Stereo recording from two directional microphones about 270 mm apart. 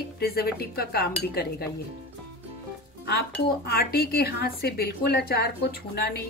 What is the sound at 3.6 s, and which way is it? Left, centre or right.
A woman's voice, left.